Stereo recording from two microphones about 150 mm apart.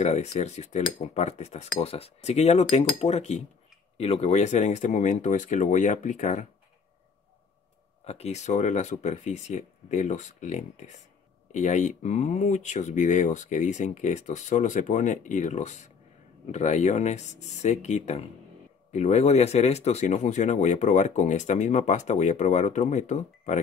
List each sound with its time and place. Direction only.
0.0 s speech: 50° left (ahead or behind)
8.0 s speech: 45° left (ahead or behind)